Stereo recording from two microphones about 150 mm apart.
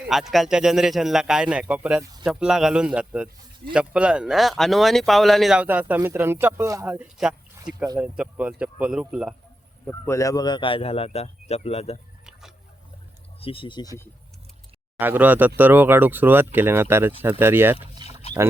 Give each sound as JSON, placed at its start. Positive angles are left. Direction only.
{"t": 0.1, "sound": "a man's voice", "side_deg": 0}
{"t": 6.8, "sound": "speech", "side_deg": -10}
{"t": 10.1, "sound": "a man's voice", "side_deg": 20}
{"t": 13.4, "sound": "a man's voice", "side_deg": 35}
{"t": 14.9, "sound": "speech", "side_deg": -10}
{"t": 18.0, "sound": "a sound", "side_deg": -30}